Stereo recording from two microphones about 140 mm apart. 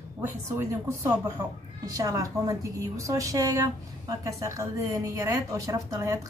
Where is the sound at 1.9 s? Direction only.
25° right (ahead or behind).